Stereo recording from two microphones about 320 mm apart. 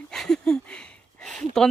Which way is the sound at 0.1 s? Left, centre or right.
Centre.